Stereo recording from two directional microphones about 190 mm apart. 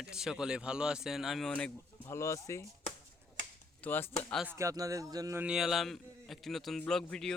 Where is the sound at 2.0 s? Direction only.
15° left (ahead or behind).